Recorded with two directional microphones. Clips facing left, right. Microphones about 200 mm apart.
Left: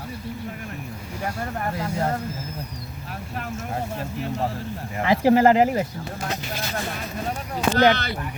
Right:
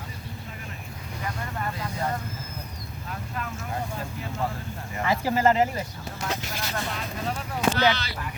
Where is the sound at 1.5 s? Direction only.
60° left (ahead or behind).